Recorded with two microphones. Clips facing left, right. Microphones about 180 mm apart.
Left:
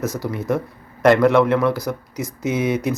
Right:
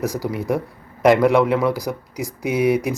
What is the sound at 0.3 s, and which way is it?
A man's voice, 15° right (ahead or behind).